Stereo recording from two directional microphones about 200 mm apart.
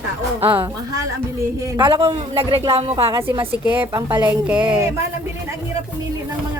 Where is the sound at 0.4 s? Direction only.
10° right (ahead or behind).